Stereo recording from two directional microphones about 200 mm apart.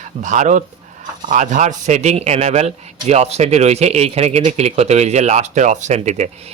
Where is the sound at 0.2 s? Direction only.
40° right (ahead or behind).